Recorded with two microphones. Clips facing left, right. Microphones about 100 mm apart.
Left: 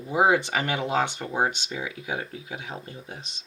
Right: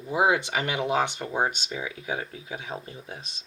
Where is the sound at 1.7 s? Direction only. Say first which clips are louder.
Even; 35° left (ahead or behind).